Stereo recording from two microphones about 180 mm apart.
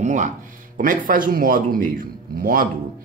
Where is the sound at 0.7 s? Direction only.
50° right (ahead or behind).